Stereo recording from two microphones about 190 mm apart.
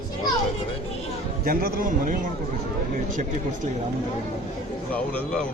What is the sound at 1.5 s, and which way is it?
Speech, 45° right (ahead or behind).